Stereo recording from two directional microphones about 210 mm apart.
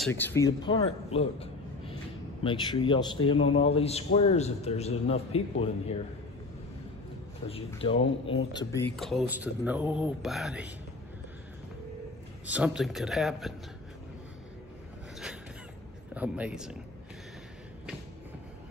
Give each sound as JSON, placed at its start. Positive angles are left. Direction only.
{"t": 0.1, "sound": "speech", "side_deg": 10}
{"t": 0.8, "sound": "a sound", "side_deg": 30}
{"t": 2.4, "sound": "a man's voice", "side_deg": 20}
{"t": 7.8, "sound": "a man's voice", "side_deg": 25}
{"t": 8.5, "sound": "speech", "side_deg": 15}
{"t": 8.9, "sound": "speech", "side_deg": 0}
{"t": 12.4, "sound": "speech", "side_deg": -5}
{"t": 16.2, "sound": "speech", "side_deg": -5}